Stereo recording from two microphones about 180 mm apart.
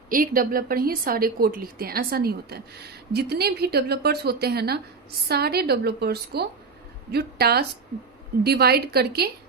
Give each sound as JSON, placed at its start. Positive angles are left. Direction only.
{"t": 0.1, "sound": "a woman's voice", "side_deg": -55}